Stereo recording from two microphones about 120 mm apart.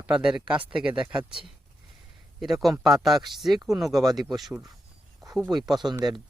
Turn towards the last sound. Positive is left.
turn(degrees=-35)  # may be behind; listen again after turning